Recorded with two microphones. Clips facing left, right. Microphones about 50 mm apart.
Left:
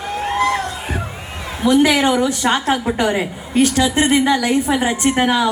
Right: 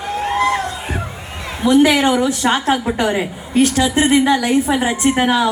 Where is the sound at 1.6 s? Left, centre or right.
Centre.